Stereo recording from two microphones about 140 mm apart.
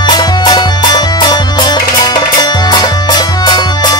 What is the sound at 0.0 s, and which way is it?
Music, 30° left (ahead or behind).